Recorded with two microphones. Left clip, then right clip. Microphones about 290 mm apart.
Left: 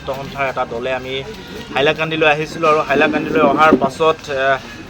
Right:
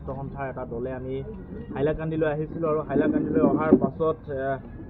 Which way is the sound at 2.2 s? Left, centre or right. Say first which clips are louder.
Left 12 dB; centre.